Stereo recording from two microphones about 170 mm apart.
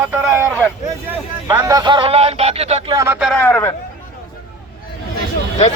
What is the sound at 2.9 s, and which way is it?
Speech, 15° right (ahead or behind).